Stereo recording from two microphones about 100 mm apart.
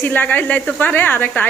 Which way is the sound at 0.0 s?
15° left (ahead or behind).